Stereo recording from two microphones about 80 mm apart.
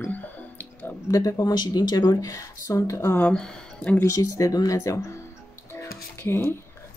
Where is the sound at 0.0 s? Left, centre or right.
Left.